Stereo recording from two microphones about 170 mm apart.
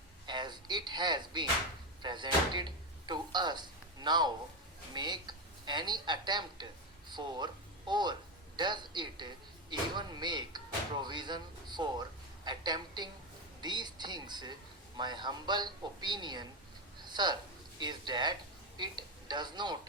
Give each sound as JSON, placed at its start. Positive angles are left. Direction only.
{"t": 0.3, "sound": "speech", "side_deg": -25}
{"t": 17.0, "sound": "a sound", "side_deg": -25}
{"t": 17.7, "sound": "a woman's voice", "side_deg": -25}